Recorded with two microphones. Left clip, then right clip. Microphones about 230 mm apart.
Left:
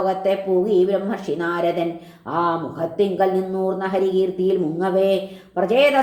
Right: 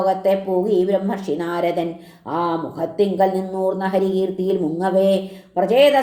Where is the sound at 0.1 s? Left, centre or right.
Right.